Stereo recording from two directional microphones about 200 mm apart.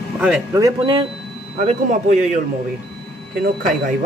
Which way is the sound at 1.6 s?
35° right (ahead or behind).